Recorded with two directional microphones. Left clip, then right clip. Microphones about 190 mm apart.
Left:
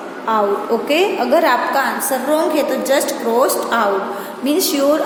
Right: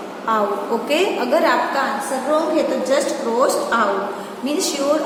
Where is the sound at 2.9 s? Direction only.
45° left (ahead or behind).